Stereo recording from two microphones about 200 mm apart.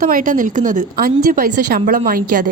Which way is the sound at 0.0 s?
45° right (ahead or behind).